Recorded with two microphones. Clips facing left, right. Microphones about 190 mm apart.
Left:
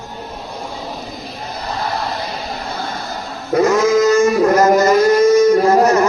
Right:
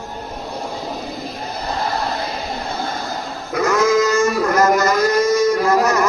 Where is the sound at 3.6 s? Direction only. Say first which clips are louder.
Left 3 dB; 25° left (ahead or behind).